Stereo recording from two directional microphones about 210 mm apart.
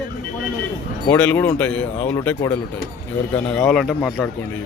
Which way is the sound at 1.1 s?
10° left (ahead or behind).